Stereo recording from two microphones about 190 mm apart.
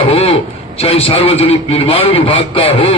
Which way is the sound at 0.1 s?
30° left (ahead or behind).